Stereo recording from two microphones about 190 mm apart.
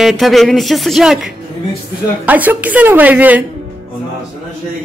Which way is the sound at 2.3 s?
10° right (ahead or behind).